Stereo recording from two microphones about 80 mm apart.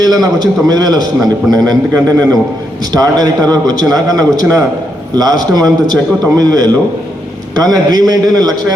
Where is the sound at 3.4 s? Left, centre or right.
Right.